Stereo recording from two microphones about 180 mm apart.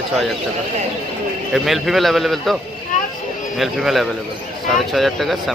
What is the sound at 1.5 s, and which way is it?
A man's voice, centre (ahead or behind).